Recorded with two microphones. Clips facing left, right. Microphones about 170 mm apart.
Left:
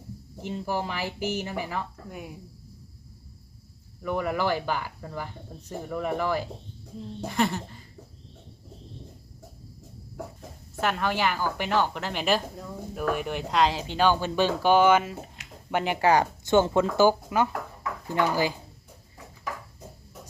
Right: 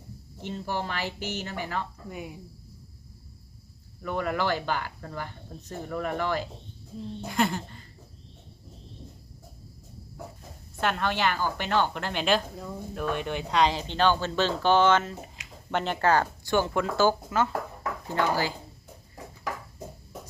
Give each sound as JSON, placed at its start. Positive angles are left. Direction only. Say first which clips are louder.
{"t": 0.4, "sound": "speech", "louder": "left 2 dB", "side_deg": 10}
{"t": 2.0, "sound": "a woman's voice", "louder": "right 1 dB", "side_deg": 0}
{"t": 4.0, "sound": "a woman's voice", "louder": "left 1 dB", "side_deg": 5}
{"t": 10.8, "sound": "a woman's voice", "louder": "left 1 dB", "side_deg": 5}